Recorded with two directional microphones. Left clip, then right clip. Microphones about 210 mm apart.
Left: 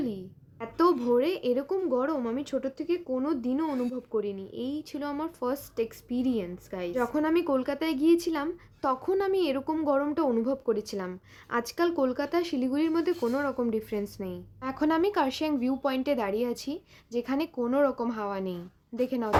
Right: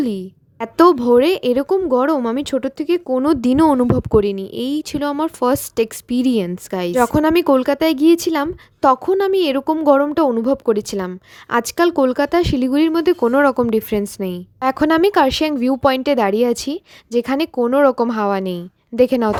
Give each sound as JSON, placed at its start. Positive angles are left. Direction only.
{"t": 0.0, "sound": "a woman's voice", "side_deg": -45}